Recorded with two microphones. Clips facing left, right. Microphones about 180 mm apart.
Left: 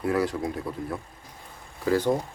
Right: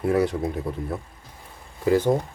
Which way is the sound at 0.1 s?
20° right (ahead or behind).